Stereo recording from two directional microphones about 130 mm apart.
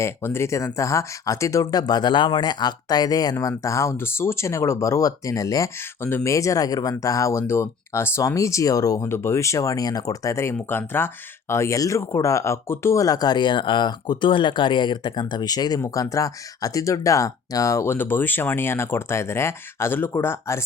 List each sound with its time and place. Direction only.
0.0 s speech: 20° left (ahead or behind)